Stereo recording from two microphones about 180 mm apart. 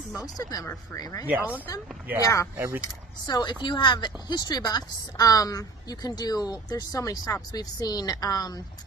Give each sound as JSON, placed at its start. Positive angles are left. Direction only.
{"t": 0.1, "sound": "a woman's voice", "side_deg": 20}
{"t": 1.2, "sound": "speech", "side_deg": -5}
{"t": 2.2, "sound": "speech", "side_deg": 15}
{"t": 2.5, "sound": "speech", "side_deg": -15}
{"t": 3.3, "sound": "a woman's voice", "side_deg": 25}